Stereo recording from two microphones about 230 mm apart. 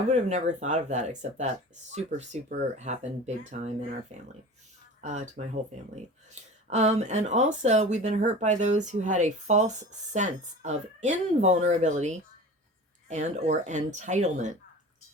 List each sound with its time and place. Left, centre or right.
0.1 s speech: right
6.7 s speech: right